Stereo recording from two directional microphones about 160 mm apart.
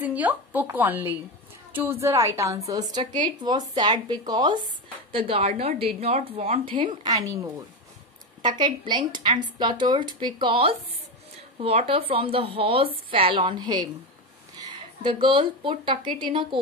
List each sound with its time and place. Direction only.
0.0 s a woman's voice: 10° right (ahead or behind); by 16.4 s 30° right (ahead or behind)